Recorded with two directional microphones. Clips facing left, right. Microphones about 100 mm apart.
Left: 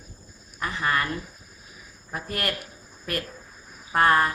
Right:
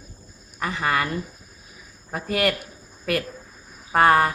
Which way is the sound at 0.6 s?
60° right (ahead or behind).